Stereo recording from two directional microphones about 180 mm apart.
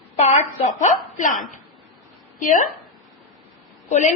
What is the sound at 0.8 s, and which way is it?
Speech, 45° left (ahead or behind).